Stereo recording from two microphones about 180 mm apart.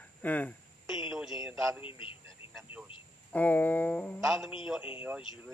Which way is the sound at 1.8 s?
30° left (ahead or behind).